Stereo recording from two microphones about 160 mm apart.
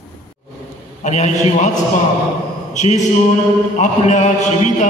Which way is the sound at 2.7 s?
50° left (ahead or behind).